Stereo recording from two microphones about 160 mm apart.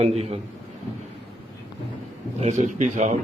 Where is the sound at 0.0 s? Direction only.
40° right (ahead or behind).